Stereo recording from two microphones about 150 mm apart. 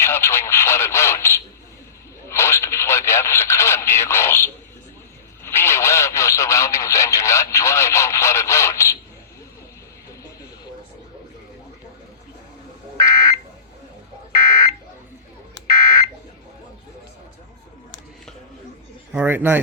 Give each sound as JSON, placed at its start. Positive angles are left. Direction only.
{"t": 0.0, "sound": "speech", "side_deg": 15}
{"t": 13.0, "sound": "a sound", "side_deg": 25}
{"t": 14.3, "sound": "buzzer", "side_deg": 25}
{"t": 15.7, "sound": "fire alarm", "side_deg": 25}
{"t": 19.1, "sound": "speech", "side_deg": -15}